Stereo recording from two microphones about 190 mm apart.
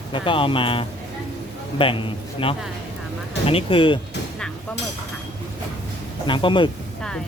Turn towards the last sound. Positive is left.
turn(degrees=25)  # may be behind; listen again after turning